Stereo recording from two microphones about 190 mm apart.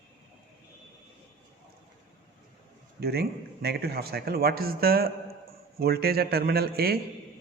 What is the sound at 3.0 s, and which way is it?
A man's voice, 55° right (ahead or behind).